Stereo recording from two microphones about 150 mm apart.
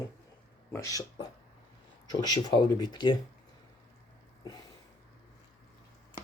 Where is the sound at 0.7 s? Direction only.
25° left (ahead or behind).